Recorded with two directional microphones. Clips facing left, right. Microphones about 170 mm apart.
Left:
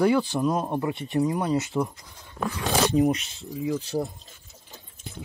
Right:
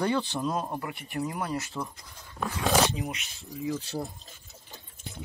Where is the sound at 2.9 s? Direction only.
45° left (ahead or behind).